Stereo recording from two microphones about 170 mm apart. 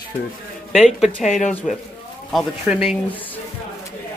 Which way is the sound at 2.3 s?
Centre (ahead or behind).